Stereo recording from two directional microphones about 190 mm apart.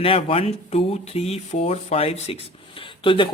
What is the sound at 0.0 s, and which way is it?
A man's voice, 30° left (ahead or behind).